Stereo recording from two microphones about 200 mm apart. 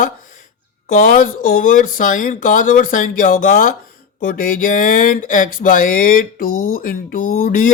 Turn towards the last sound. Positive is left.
turn(degrees=45)  # may be behind; listen again after turning